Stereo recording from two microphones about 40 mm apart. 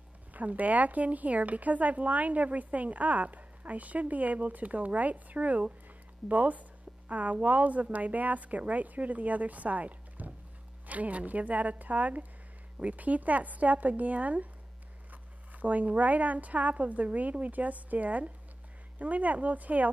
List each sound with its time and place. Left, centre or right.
0.3 s speech: right
15.5 s speech: right